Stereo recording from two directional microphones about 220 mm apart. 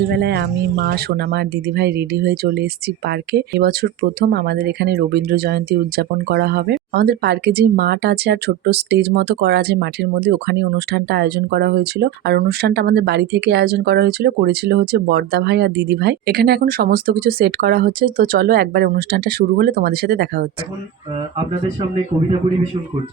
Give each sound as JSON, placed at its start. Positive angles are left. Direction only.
{"t": 0.1, "sound": "speech", "side_deg": -50}